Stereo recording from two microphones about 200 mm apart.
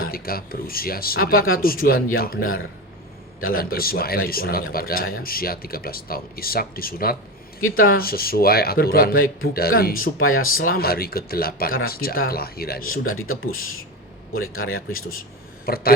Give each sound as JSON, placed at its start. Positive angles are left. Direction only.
{"t": 0.0, "sound": "speech", "side_deg": 50}
{"t": 3.5, "sound": "speech", "side_deg": 50}
{"t": 10.2, "sound": "speech", "side_deg": 90}
{"t": 10.8, "sound": "speech", "side_deg": 50}
{"t": 13.1, "sound": "speech", "side_deg": 90}
{"t": 15.6, "sound": "speech", "side_deg": 50}